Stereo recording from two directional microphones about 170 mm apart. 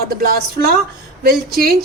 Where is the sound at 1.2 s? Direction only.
65° right (ahead or behind).